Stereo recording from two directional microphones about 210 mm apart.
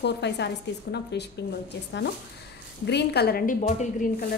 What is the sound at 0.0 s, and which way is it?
A woman's voice, 55° left (ahead or behind).